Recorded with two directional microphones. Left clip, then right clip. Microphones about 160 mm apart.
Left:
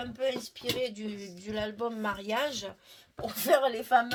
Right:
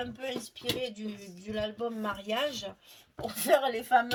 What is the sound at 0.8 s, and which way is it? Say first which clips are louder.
Speech: left 3 dB; 45° left (ahead or behind).